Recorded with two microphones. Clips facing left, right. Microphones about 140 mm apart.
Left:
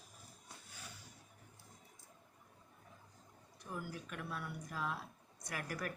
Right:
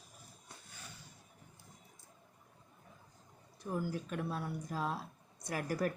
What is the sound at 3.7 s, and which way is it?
Speech, 35° right (ahead or behind).